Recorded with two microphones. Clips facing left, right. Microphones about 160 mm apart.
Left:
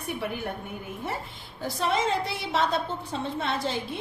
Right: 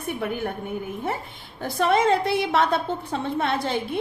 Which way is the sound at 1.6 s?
55° right (ahead or behind).